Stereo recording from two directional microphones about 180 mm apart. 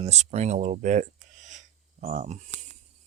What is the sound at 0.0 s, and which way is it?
Speech, 40° right (ahead or behind).